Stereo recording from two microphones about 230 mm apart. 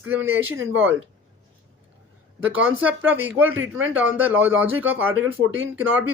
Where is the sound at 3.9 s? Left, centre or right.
Centre.